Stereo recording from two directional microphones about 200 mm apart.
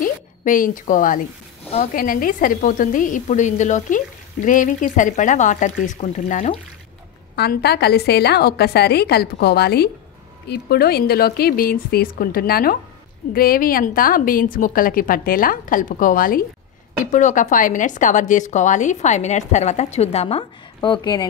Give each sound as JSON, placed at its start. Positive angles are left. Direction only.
{"t": 0.0, "sound": "a woman's voice", "side_deg": 40}
{"t": 7.3, "sound": "a woman's voice", "side_deg": 55}